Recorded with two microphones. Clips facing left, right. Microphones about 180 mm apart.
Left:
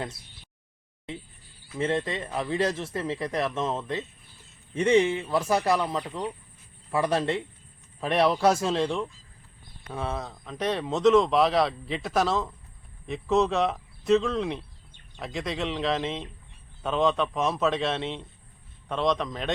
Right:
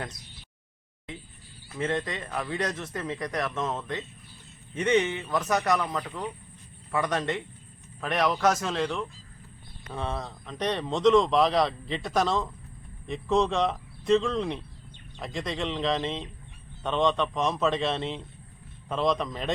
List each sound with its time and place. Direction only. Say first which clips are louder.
1.8 s speech: left 2 dB; 30° left (ahead or behind)
9.9 s speech: left 1 dB; 5° left (ahead or behind)